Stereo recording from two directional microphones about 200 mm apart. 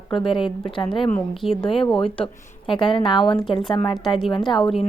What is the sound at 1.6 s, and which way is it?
Speech, 25° left (ahead or behind).